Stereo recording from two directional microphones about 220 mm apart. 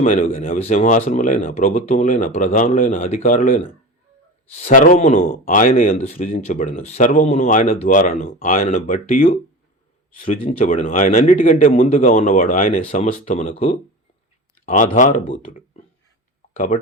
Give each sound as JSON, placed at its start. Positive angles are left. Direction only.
{"t": 0.0, "sound": "speech", "side_deg": 35}
{"t": 10.4, "sound": "speech", "side_deg": 35}
{"t": 14.9, "sound": "speech", "side_deg": 35}